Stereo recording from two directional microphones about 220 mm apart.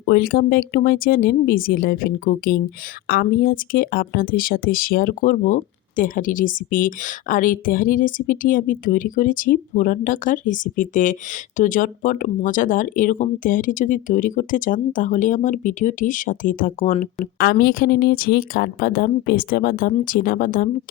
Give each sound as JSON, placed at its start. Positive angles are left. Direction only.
{"t": 0.0, "sound": "speech", "side_deg": 45}